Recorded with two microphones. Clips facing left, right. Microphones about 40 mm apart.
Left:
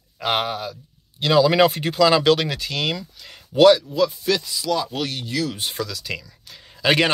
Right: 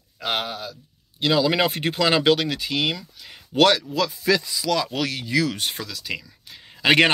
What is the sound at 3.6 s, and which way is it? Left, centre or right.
Speech, right.